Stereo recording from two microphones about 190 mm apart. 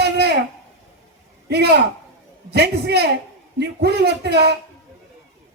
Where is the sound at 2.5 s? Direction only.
60° right (ahead or behind).